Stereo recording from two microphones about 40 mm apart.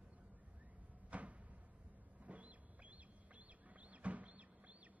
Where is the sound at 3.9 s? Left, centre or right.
Right.